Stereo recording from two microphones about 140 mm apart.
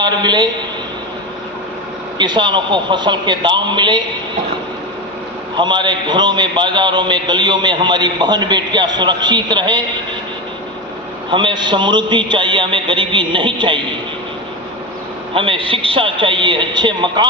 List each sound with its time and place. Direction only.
0.0 s a man's voice: 30° right (ahead or behind)
2.1 s a man's voice: 30° right (ahead or behind)
5.5 s a man's voice: 35° right (ahead or behind)
11.3 s a man's voice: 35° right (ahead or behind)
15.4 s a man's voice: 40° right (ahead or behind)